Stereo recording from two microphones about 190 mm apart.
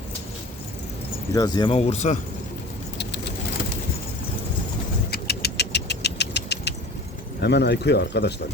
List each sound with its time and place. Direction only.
1.3 s speech: 20° left (ahead or behind)
1.7 s speech: 35° left (ahead or behind)
5.1 s vehicle: 60° left (ahead or behind)
7.4 s speech: 60° left (ahead or behind)